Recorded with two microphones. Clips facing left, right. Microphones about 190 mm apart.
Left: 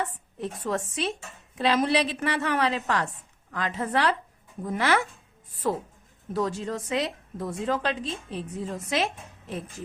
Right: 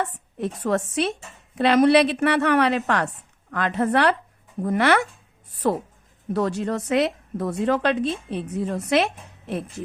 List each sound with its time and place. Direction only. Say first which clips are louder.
0.3 s a woman's voice: right 6 dB; 70° right (ahead or behind)